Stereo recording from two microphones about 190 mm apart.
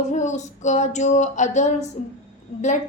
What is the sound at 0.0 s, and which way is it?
A woman's voice, 40° left (ahead or behind).